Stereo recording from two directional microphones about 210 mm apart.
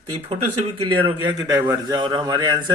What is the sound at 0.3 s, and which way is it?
Speech, 25° right (ahead or behind).